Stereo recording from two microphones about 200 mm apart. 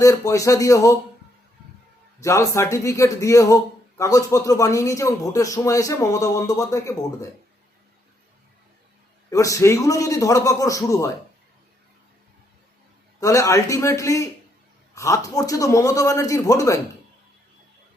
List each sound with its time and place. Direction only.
0.0 s a man's voice: 15° left (ahead or behind)
2.2 s a man's voice: 15° left (ahead or behind)
9.3 s a man's voice: 15° left (ahead or behind)
13.1 s a man's voice: 15° left (ahead or behind)